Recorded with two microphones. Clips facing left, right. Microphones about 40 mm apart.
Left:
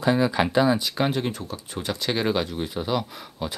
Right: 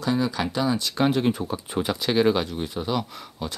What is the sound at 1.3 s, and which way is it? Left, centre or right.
Speech, centre.